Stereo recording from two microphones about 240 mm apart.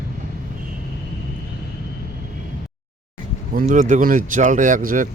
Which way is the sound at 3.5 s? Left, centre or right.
Right.